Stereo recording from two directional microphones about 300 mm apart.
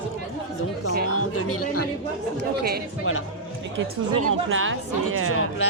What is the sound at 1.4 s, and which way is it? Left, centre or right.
Speech, left.